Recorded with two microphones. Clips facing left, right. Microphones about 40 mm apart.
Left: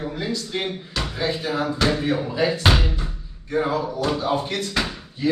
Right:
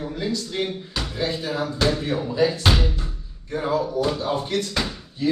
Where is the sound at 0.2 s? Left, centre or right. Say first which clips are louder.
Right 2 dB; centre.